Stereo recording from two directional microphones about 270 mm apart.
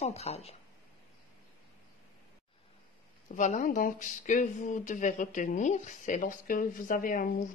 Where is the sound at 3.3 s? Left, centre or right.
Left.